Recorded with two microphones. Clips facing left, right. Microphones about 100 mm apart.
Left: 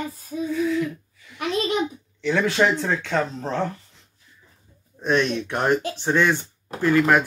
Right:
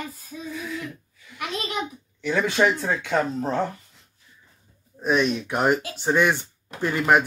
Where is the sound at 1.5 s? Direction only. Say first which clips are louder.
Left 7 dB; 30° left (ahead or behind).